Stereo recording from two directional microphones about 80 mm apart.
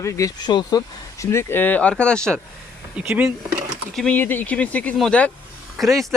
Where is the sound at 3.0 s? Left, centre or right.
Centre.